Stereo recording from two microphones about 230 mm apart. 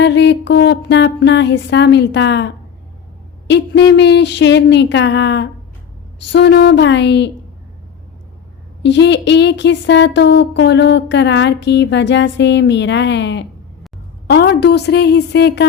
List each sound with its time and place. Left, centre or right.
0.0 s speech: left
8.8 s speech: left